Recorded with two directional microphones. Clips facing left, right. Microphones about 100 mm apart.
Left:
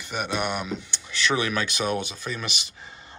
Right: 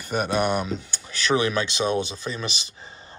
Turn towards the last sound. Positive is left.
turn(degrees=-30)  # may be behind; listen again after turning